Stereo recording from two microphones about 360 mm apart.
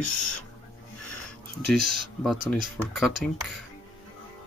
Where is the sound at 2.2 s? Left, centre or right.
Centre.